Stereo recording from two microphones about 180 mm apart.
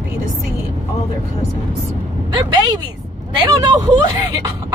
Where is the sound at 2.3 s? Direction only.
25° right (ahead or behind).